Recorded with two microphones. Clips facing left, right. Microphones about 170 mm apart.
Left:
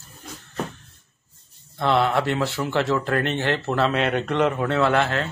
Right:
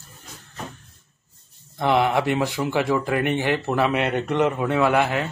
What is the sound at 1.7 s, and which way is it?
Speech, 15° right (ahead or behind).